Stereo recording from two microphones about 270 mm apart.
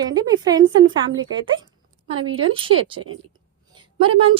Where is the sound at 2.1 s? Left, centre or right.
Right.